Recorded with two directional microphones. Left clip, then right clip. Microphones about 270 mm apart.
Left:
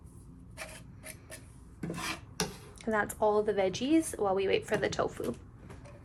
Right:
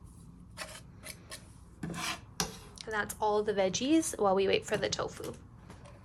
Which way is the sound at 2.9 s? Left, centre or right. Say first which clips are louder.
Left 3 dB; centre.